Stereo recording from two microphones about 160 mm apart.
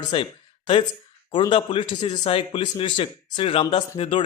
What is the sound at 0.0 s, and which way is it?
Speech, 30° left (ahead or behind).